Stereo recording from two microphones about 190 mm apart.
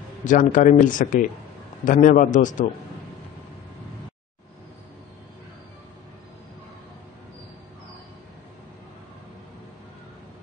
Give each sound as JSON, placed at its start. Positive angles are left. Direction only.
{"t": 0.2, "sound": "speech", "side_deg": 45}